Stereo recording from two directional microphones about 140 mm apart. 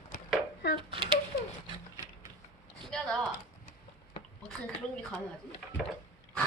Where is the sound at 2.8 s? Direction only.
5° left (ahead or behind).